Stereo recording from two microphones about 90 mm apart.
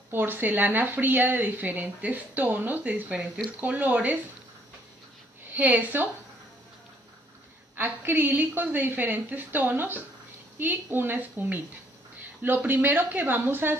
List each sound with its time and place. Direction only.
0.1 s speech: 20° right (ahead or behind)
5.5 s speech: 20° right (ahead or behind)
7.7 s speech: 25° right (ahead or behind)